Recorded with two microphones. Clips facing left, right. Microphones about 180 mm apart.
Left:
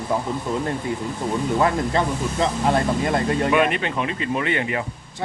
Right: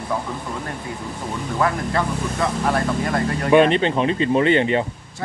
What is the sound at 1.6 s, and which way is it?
Speech, 20° left (ahead or behind).